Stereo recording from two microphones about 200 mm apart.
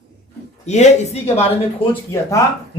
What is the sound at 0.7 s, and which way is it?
Speech, 35° left (ahead or behind).